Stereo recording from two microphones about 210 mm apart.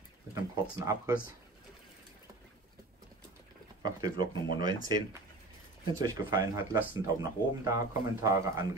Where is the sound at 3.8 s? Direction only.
20° right (ahead or behind).